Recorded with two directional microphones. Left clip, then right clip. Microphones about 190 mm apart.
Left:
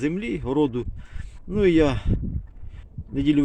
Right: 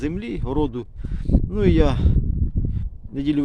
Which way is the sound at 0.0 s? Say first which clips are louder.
Left 1 dB; 5° left (ahead or behind).